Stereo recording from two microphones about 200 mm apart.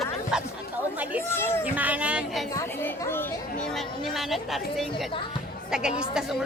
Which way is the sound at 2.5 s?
15° left (ahead or behind).